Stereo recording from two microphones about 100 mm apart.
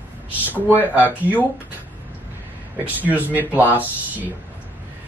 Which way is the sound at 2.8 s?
15° right (ahead or behind).